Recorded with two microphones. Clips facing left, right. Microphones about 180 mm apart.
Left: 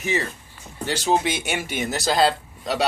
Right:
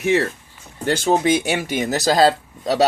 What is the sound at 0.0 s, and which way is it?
Speech, 65° right (ahead or behind).